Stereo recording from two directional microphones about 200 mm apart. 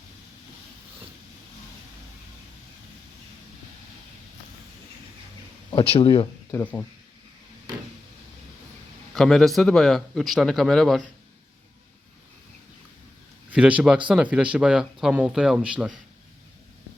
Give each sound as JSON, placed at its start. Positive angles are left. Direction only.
{"t": 5.7, "sound": "speech", "side_deg": 30}
{"t": 6.5, "sound": "speech", "side_deg": 10}
{"t": 9.1, "sound": "a man's voice", "side_deg": 0}
{"t": 13.5, "sound": "a man's voice", "side_deg": -5}